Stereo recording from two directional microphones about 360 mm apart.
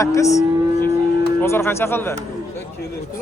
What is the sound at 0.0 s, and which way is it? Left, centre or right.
Speech, centre.